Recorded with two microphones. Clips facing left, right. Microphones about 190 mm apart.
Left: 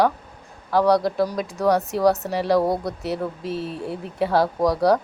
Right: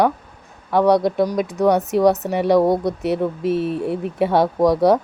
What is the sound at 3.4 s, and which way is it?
Speech, 60° right (ahead or behind).